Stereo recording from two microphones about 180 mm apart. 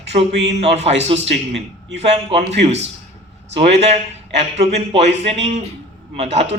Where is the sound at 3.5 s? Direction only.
35° right (ahead or behind).